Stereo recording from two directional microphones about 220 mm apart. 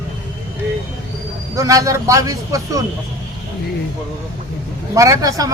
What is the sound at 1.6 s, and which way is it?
Speech, 15° right (ahead or behind).